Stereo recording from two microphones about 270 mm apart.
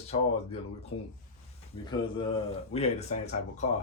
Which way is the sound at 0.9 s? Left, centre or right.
Left.